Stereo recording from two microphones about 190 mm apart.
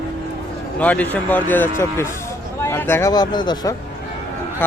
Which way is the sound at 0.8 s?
5° left (ahead or behind).